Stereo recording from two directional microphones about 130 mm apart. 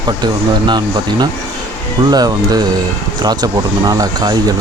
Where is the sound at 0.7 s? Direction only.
30° right (ahead or behind).